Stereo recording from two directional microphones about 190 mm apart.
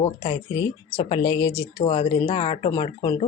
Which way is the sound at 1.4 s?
90° left.